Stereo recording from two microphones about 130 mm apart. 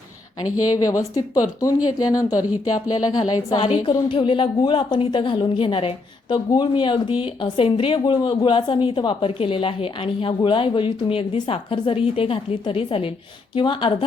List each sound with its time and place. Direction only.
0.7 s speech: 25° left (ahead or behind)
2.5 s speech: 10° right (ahead or behind)
3.2 s a woman's voice: 35° left (ahead or behind)